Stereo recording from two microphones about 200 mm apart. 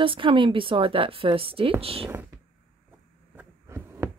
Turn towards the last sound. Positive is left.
turn(degrees=-10)  # may be behind; listen again after turning